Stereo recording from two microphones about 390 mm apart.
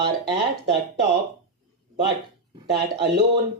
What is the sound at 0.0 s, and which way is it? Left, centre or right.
Speech, right.